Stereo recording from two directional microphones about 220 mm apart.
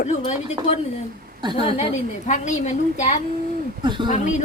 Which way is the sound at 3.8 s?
20° right (ahead or behind).